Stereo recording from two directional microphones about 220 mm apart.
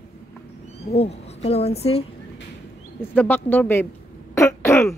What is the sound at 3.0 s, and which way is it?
Speech, 10° left (ahead or behind).